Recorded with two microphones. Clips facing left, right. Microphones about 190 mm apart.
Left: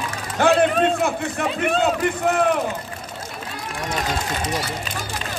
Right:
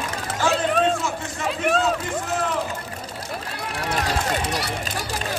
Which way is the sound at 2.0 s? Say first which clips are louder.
Left 6 dB; 65° left (ahead or behind).